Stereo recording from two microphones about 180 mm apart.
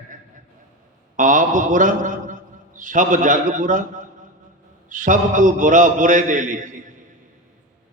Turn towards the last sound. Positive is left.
turn(degrees=-45)  # may be behind; listen again after turning